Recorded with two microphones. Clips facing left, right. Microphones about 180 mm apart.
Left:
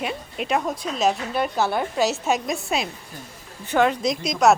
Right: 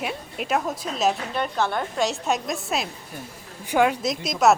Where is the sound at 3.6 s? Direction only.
10° right (ahead or behind).